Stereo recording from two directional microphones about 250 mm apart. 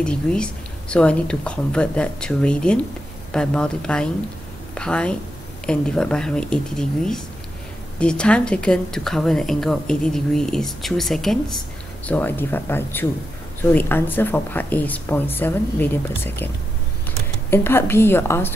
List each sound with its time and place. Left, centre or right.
0.0 s a woman's voice: centre
17.5 s speech: centre